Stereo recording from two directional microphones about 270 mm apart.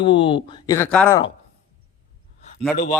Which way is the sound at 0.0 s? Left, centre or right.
Centre.